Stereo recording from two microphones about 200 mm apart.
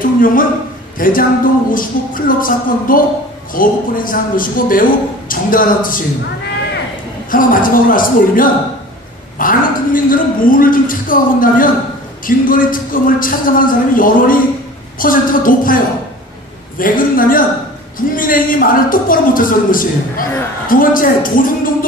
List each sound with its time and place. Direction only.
0.2 s speech: 45° left (ahead or behind)
7.2 s speech: 45° left (ahead or behind)